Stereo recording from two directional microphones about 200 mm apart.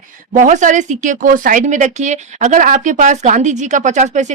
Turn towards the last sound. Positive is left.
turn(degrees=-35)  # may be behind; listen again after turning